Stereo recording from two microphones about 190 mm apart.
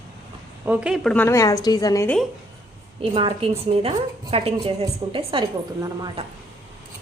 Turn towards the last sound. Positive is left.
turn(degrees=-25)  # may be behind; listen again after turning